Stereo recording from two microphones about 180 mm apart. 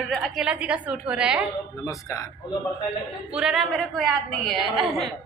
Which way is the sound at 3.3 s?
5° right (ahead or behind).